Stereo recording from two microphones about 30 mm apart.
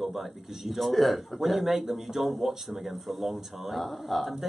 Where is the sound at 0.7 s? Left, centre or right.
Centre.